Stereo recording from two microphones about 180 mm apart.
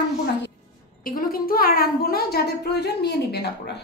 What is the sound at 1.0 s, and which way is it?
A woman's voice, 55° left (ahead or behind).